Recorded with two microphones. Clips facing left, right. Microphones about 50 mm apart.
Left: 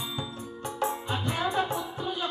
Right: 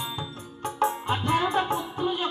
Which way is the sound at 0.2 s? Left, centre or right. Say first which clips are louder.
Right 1 dB; right.